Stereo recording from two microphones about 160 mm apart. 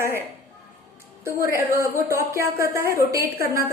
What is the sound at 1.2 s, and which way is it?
A woman's voice, 20° right (ahead or behind).